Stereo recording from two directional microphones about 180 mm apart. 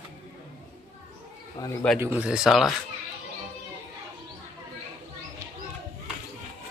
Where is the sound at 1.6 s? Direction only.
20° left (ahead or behind).